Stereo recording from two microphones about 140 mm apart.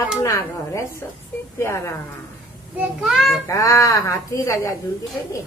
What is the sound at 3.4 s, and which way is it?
Speech, 20° left (ahead or behind).